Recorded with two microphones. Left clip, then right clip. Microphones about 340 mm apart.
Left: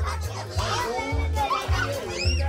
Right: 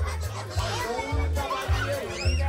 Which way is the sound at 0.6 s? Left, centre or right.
Centre.